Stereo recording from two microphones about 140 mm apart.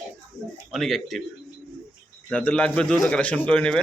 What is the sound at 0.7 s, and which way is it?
Speech, centre (ahead or behind).